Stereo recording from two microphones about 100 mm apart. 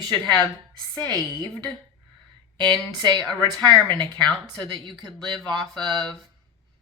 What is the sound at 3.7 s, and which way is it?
Speech, 50° right (ahead or behind).